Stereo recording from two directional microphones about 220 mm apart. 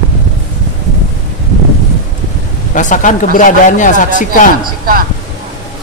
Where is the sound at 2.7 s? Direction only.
35° left (ahead or behind).